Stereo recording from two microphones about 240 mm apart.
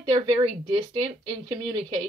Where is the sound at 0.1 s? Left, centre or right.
Right.